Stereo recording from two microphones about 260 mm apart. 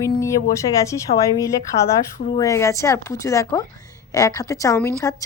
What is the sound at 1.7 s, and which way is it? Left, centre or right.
Speech, left.